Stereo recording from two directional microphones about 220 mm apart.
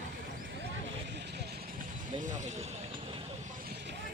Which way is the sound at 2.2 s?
35° right (ahead or behind).